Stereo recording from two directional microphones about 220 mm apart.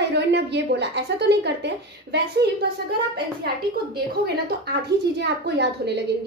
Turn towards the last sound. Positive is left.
turn(degrees=-50)  # may be behind; listen again after turning